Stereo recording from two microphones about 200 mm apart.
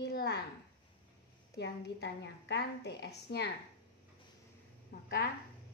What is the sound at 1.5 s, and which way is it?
A woman's voice, 60° left (ahead or behind).